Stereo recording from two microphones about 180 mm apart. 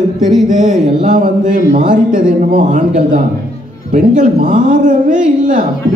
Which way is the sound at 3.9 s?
45° right (ahead or behind).